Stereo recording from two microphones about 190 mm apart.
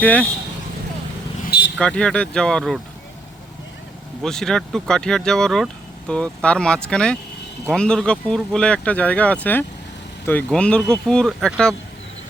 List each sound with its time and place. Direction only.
0.0 s speech: 5° left (ahead or behind)
1.5 s vehicle: 60° left (ahead or behind)
1.8 s speech: 5° left (ahead or behind)
4.2 s speech: centre (ahead or behind)